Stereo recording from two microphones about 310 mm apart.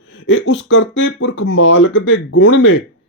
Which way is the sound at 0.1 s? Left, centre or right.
Left.